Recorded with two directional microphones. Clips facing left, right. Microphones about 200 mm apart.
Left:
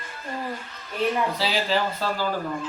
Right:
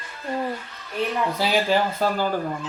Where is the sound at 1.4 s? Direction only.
50° right (ahead or behind).